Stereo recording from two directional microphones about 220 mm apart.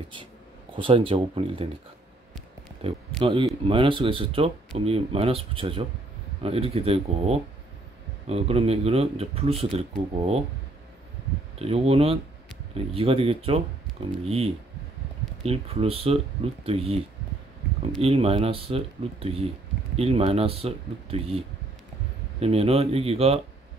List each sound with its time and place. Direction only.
0.7 s speech: 25° right (ahead or behind)
2.8 s speech: 25° right (ahead or behind)
11.5 s speech: 25° right (ahead or behind)
18.0 s speech: 25° right (ahead or behind)